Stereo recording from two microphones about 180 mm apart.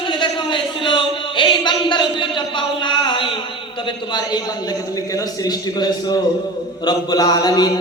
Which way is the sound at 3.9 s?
25° left (ahead or behind).